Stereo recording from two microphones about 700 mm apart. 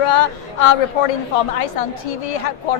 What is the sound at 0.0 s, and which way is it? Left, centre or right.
A woman's voice, left.